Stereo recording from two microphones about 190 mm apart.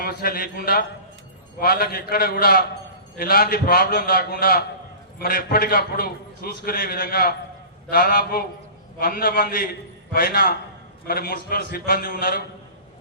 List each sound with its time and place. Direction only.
0.0 s a man's voice: 50° left (ahead or behind)